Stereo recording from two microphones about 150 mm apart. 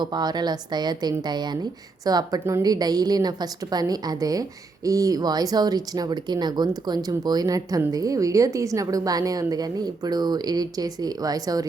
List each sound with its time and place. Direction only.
0.0 s a woman's voice: 30° right (ahead or behind)